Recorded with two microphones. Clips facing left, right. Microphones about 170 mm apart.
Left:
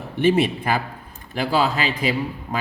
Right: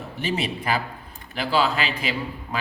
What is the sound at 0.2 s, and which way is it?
Speech, 50° left (ahead or behind).